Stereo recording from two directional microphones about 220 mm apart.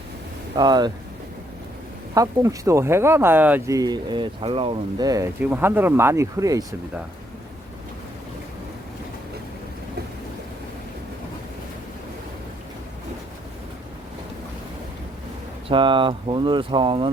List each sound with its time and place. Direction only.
0.5 s speech: 20° right (ahead or behind)
2.1 s speech: 15° right (ahead or behind)
15.7 s speech: 20° right (ahead or behind)